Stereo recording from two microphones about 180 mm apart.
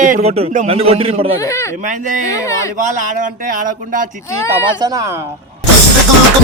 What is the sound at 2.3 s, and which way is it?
Speech, 15° left (ahead or behind).